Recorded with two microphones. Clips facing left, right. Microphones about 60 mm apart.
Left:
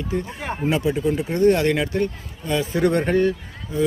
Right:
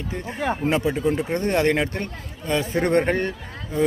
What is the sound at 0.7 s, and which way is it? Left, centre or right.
A man's voice, right.